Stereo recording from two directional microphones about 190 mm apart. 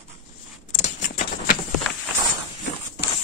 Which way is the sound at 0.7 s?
40° left (ahead or behind).